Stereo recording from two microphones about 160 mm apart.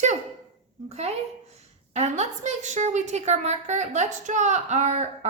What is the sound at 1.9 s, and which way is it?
A woman's voice, 45° right (ahead or behind).